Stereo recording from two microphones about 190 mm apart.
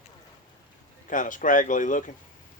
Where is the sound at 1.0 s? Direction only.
45° left (ahead or behind).